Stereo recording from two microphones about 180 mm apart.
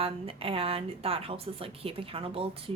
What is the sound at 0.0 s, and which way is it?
A woman's voice, 30° right (ahead or behind).